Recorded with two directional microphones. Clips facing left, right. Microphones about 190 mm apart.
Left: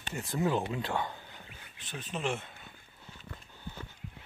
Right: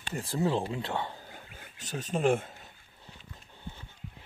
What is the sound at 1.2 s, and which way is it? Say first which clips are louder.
Wild animals: right 3 dB; 45° right (ahead or behind).